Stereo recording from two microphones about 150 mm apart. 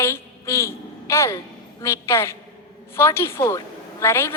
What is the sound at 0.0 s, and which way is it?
A woman's voice, 20° left (ahead or behind).